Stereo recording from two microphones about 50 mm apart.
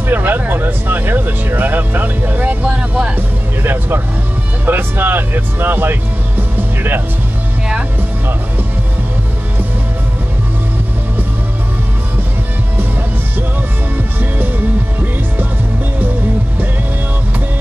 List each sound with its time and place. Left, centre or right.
0.1 s speech: right
2.6 s speech: right
3.2 s speech: right
6.5 s music: right